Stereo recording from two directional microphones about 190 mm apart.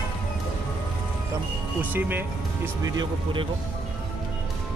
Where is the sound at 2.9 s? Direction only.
25° right (ahead or behind).